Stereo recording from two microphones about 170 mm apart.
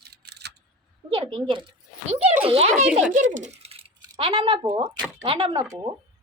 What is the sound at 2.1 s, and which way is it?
Speech, 40° right (ahead or behind).